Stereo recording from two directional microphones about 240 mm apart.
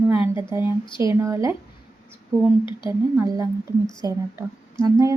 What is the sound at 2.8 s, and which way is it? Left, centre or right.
A woman's voice, centre.